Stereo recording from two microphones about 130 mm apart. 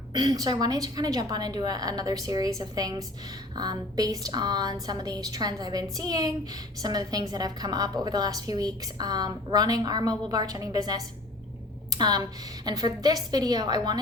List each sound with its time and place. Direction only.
0.1 s a woman's voice: 35° right (ahead or behind)
11.9 s a sound: 30° right (ahead or behind)
12.6 s a woman's voice: 30° right (ahead or behind)